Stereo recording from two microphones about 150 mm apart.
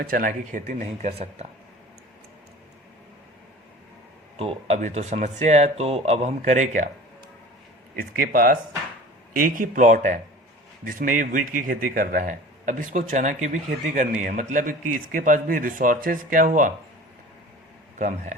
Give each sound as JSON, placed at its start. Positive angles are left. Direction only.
{"t": 0.0, "sound": "speech", "side_deg": -70}
{"t": 0.7, "sound": "speech", "side_deg": -50}
{"t": 4.4, "sound": "speech", "side_deg": -45}
{"t": 7.9, "sound": "a man's voice", "side_deg": -70}
{"t": 17.9, "sound": "speech", "side_deg": -55}